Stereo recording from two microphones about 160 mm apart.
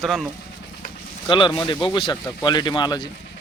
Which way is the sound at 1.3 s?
30° left (ahead or behind).